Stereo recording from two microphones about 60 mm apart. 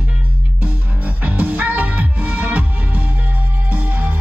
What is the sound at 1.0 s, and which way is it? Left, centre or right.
Music, right.